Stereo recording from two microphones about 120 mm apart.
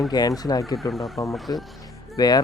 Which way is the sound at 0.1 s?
35° left (ahead or behind).